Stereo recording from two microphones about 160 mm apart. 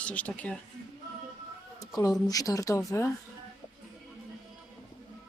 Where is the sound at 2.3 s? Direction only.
20° left (ahead or behind).